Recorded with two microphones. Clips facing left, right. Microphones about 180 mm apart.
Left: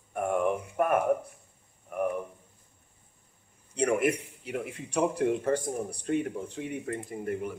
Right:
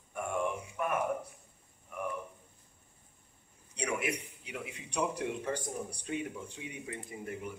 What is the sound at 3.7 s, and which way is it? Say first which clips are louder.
A man's voice: left 9 dB; 50° left (ahead or behind).